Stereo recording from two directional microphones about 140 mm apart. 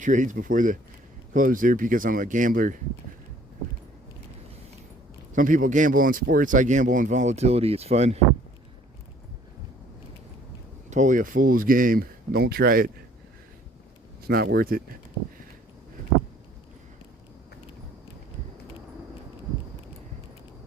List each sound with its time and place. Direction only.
0.0 s speech: 65° right (ahead or behind)
5.3 s speech: 70° right (ahead or behind); by 8.2 s 50° right (ahead or behind)
10.8 s speech: 60° right (ahead or behind); by 12.9 s 90° right
14.3 s speech: 90° right